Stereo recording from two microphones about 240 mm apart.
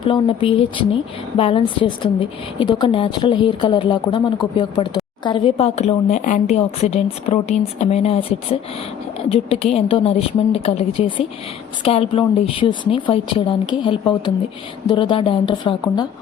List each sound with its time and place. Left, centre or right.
0.0 s speech: left
5.2 s speech: left